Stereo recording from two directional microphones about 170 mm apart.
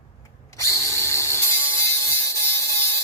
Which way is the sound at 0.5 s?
20° left (ahead or behind).